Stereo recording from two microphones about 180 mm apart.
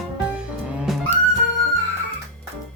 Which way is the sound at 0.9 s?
Centre (ahead or behind).